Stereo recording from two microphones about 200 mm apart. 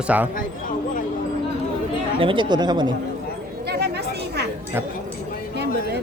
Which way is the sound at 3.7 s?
55° right (ahead or behind).